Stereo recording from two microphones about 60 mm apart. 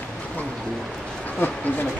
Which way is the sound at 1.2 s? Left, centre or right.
Left.